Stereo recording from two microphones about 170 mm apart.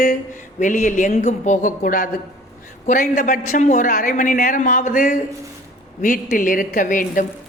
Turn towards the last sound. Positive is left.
turn(degrees=50)  # may be behind; listen again after turning